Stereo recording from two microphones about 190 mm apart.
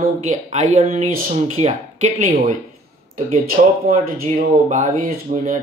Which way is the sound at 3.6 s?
40° right (ahead or behind).